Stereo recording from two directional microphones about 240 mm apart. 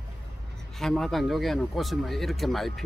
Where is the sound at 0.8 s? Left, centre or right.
Centre.